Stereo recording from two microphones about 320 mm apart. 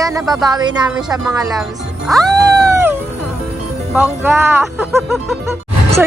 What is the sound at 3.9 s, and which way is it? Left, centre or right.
Speech, centre.